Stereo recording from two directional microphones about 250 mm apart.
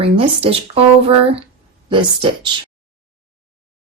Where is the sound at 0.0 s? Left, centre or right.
Right.